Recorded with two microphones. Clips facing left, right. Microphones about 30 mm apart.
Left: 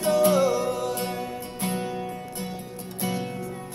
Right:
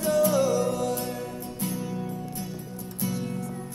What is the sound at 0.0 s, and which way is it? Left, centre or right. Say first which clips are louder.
Music: left 2 dB; left.